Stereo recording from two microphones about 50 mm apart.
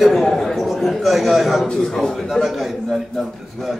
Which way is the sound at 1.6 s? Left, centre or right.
Centre.